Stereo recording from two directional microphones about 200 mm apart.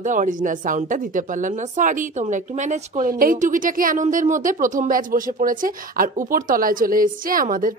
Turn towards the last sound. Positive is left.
turn(degrees=-45)  # may be behind; listen again after turning